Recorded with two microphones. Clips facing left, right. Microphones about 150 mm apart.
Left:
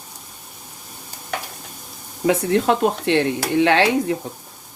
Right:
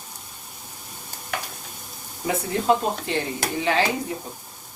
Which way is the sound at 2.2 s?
85° left.